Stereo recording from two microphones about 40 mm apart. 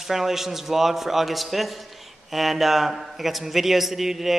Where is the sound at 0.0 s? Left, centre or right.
Centre.